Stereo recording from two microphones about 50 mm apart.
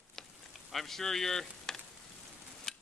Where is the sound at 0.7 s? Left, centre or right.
Centre.